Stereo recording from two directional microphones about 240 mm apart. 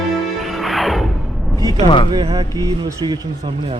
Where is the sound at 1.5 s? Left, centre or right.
Centre.